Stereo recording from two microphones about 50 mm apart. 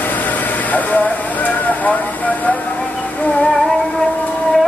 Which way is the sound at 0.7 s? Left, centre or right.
Left.